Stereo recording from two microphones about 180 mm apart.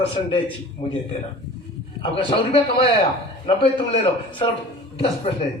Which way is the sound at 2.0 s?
30° left (ahead or behind).